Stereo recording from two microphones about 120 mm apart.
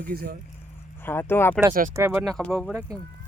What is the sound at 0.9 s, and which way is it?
Speech, 20° left (ahead or behind).